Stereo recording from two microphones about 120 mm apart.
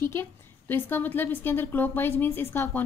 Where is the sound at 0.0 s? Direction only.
20° left (ahead or behind).